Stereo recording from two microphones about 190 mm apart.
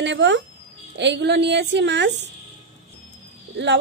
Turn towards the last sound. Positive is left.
turn(degrees=-65)  # may be behind; listen again after turning